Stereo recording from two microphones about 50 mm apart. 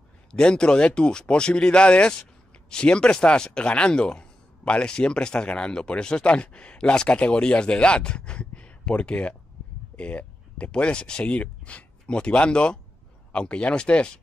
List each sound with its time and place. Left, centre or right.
0.3 s speech: centre